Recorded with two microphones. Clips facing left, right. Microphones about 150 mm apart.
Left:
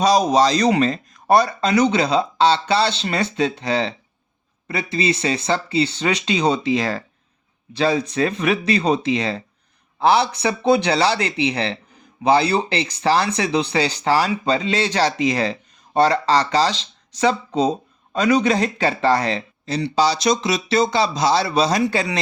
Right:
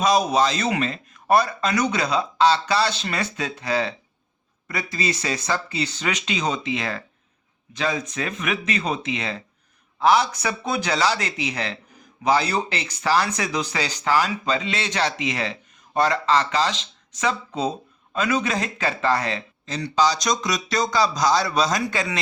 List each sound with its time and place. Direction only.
0.0 s speech: 35° left (ahead or behind)